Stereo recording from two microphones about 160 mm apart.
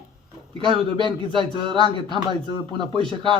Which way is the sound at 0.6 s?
30° right (ahead or behind).